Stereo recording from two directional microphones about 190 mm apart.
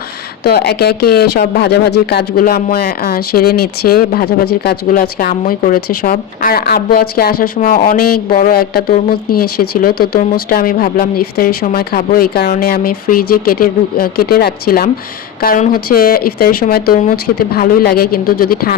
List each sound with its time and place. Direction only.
0.4 s speech: 55° left (ahead or behind)